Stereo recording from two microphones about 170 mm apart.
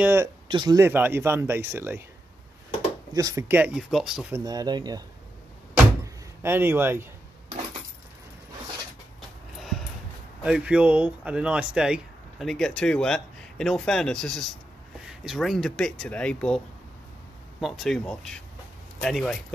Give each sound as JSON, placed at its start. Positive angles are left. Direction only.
{"t": 0.0, "sound": "speech", "side_deg": -15}
{"t": 0.5, "sound": "speech", "side_deg": -25}
{"t": 0.7, "sound": "speech", "side_deg": -15}
{"t": 3.1, "sound": "speech", "side_deg": -20}
{"t": 4.3, "sound": "speech", "side_deg": -20}
{"t": 6.4, "sound": "speech", "side_deg": -15}
{"t": 9.6, "sound": "a sound", "side_deg": 0}
{"t": 10.4, "sound": "speech", "side_deg": -5}